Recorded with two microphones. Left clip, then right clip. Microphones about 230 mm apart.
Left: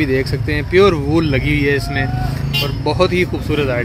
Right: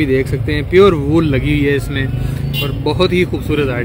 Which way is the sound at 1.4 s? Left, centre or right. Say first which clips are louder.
Right 1 dB; right.